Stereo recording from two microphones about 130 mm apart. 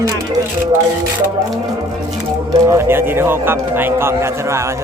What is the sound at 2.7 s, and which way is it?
A man's voice, 20° right (ahead or behind).